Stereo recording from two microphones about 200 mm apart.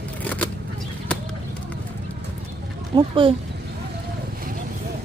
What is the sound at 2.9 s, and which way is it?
Speech, 25° right (ahead or behind).